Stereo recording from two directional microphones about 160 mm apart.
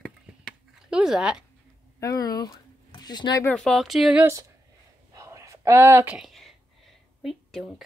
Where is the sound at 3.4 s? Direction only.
5° left (ahead or behind).